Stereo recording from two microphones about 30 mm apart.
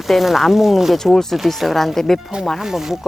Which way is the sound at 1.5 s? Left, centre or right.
Centre.